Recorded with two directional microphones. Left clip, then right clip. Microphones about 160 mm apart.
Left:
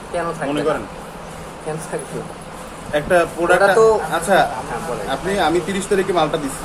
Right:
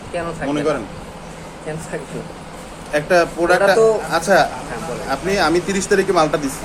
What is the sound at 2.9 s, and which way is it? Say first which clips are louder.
A man's voice: right 1 dB; 20° right (ahead or behind).